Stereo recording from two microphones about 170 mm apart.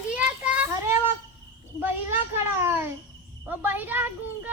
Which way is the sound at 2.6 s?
15° right (ahead or behind).